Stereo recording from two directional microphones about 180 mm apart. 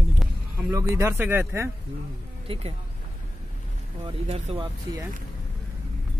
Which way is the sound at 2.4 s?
30° right (ahead or behind).